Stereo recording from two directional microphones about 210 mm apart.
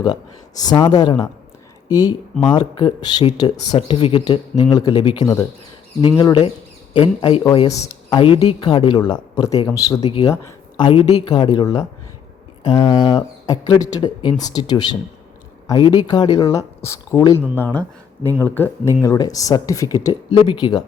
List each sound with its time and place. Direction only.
0.6 s speech: 20° left (ahead or behind)
10.0 s speech: 30° left (ahead or behind)